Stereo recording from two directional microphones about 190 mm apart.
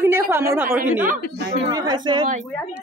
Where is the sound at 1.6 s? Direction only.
20° right (ahead or behind).